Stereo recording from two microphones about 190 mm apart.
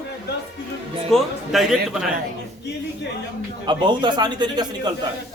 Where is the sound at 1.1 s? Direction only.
Centre (ahead or behind).